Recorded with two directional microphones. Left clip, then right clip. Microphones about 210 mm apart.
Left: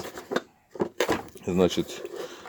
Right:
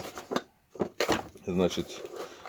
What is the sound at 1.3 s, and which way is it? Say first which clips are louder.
Speech: left 5 dB; 40° left (ahead or behind).